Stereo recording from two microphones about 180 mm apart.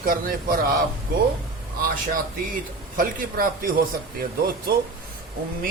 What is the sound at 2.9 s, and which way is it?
Speech, 50° right (ahead or behind).